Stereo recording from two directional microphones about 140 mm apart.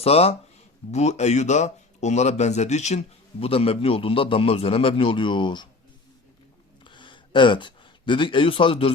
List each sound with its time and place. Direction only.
0.0 s speech: 45° left (ahead or behind)
3.4 s a man's voice: 45° left (ahead or behind)
6.8 s a sound: 35° left (ahead or behind)